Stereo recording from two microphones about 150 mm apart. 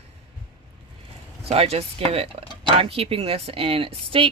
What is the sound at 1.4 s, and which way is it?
Speech, 40° right (ahead or behind).